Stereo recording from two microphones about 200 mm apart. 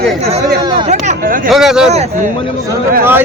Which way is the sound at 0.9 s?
35° right (ahead or behind).